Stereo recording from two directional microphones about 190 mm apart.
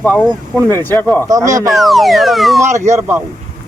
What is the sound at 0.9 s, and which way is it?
Speech, 10° left (ahead or behind).